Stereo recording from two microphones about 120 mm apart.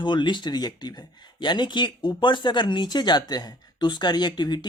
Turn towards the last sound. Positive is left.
turn(degrees=35)  # may be behind; listen again after turning